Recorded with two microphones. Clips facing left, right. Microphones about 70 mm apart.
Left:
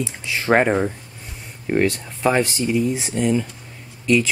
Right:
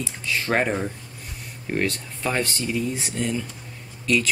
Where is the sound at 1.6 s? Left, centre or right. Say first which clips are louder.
Left 6 dB; centre.